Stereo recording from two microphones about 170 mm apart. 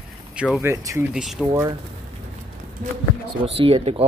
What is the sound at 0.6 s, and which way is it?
Speech, 15° right (ahead or behind).